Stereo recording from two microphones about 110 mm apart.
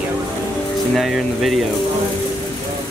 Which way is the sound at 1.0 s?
Centre (ahead or behind).